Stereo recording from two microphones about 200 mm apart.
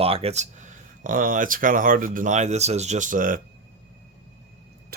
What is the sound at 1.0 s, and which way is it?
Speech, 40° right (ahead or behind).